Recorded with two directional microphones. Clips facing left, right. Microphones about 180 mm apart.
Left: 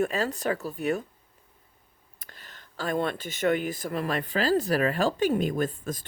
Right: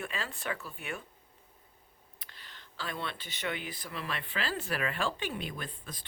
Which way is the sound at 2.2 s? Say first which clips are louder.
Left 4 dB; 45° left (ahead or behind).